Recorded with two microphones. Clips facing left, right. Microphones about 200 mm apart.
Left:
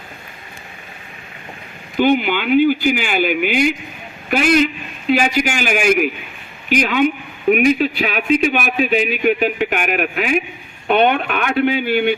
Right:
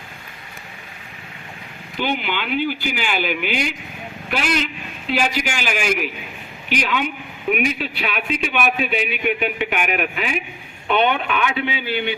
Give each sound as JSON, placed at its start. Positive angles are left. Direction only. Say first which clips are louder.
{"t": 2.0, "sound": "speech", "louder": "left 9 dB", "side_deg": 50}